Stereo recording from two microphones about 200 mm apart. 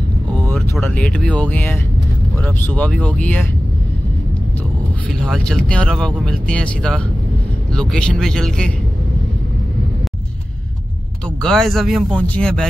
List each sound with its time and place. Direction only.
0.5 s speech: 5° left (ahead or behind)
5.2 s speech: 5° left (ahead or behind)
11.4 s speech: centre (ahead or behind)